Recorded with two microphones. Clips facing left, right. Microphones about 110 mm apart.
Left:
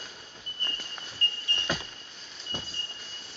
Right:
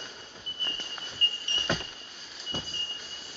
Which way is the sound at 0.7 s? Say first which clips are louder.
Right 1 dB; centre (ahead or behind).